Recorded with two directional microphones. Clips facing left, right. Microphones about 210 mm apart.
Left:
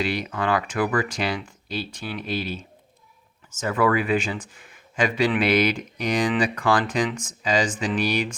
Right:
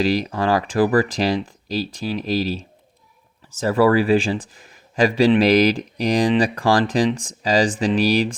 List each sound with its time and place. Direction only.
0.0 s speech: 35° right (ahead or behind)